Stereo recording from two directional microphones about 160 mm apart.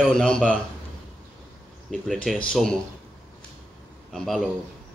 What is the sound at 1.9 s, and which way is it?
Speech, centre (ahead or behind).